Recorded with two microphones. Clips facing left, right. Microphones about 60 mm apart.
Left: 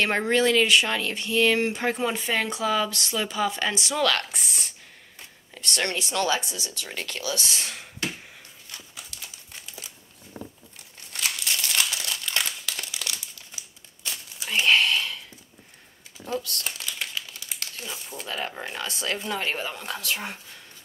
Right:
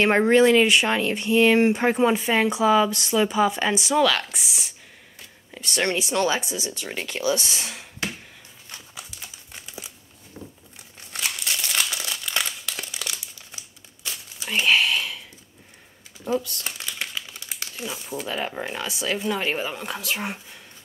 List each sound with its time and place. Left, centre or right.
0.0 s speech: right
7.4 s speech: centre
10.4 s a sound: centre
11.1 s crumpling: centre
16.3 s speech: centre
16.6 s speech: centre